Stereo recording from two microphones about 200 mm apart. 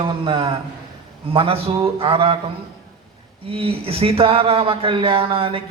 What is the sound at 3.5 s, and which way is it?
Speech, 30° right (ahead or behind).